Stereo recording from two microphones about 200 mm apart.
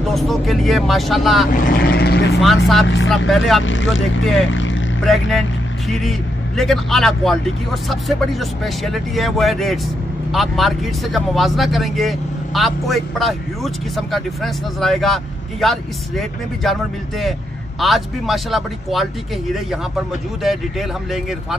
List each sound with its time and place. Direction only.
0.1 s speech: centre (ahead or behind)
1.5 s speech: 45° left (ahead or behind)
2.4 s speech: centre (ahead or behind)
3.6 s speech: 70° left (ahead or behind)
4.5 s vehicle: 70° left (ahead or behind)
5.0 s speech: centre (ahead or behind)
20.4 s speech: centre (ahead or behind)